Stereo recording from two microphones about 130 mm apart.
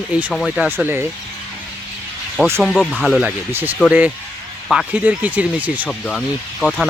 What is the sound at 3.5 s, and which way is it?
Speech, 15° right (ahead or behind).